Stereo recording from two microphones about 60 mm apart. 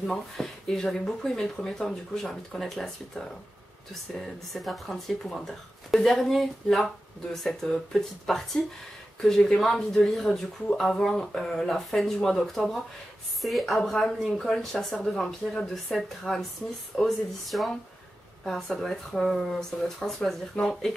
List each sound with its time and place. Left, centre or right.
0.4 s speech: centre